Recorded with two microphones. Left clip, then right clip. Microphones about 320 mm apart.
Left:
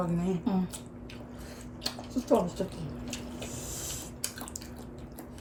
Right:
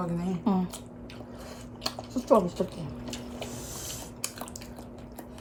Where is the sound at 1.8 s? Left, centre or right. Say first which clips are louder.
Right 1 dB; centre.